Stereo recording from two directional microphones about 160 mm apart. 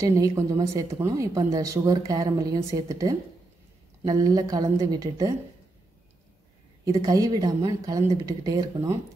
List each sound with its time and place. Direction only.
0.0 s speech: 20° right (ahead or behind)
6.8 s speech: 20° right (ahead or behind)